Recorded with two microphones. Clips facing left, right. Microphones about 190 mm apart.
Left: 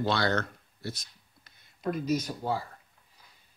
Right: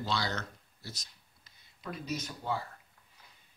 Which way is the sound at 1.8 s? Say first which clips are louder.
Left 9 dB; 45° left (ahead or behind).